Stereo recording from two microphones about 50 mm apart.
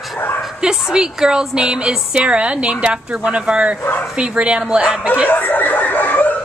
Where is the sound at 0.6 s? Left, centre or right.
Centre.